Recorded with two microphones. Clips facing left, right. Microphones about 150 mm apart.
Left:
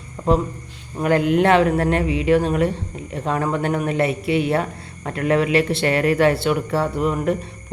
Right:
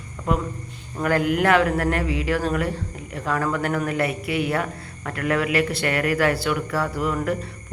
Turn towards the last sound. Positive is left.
turn(degrees=25)  # may be behind; listen again after turning